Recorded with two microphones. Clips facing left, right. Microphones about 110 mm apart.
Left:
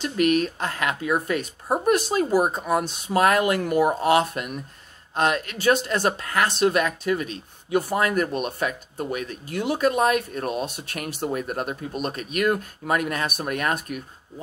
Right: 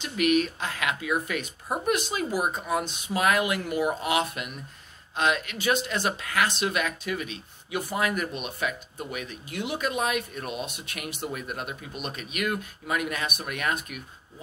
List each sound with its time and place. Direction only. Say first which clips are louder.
0.0 s speech: left 3 dB; 40° left (ahead or behind)